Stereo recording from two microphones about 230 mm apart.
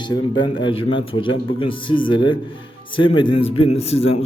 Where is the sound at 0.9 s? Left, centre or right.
Left.